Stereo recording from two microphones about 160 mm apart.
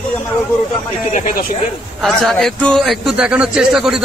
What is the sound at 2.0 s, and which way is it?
A man's voice, centre (ahead or behind).